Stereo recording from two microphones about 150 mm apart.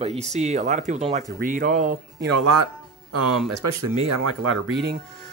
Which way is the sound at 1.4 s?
65° right (ahead or behind).